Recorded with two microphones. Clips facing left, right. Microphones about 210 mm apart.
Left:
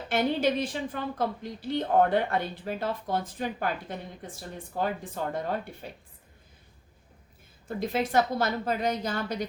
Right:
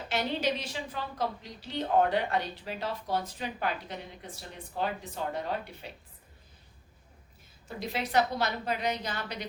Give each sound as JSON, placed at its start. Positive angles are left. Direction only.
{"t": 0.1, "sound": "a woman's voice", "side_deg": 55}
{"t": 7.8, "sound": "a woman's voice", "side_deg": 50}